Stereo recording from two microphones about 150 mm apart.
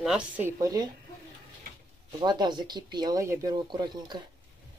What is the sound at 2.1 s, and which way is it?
Speech, 30° right (ahead or behind).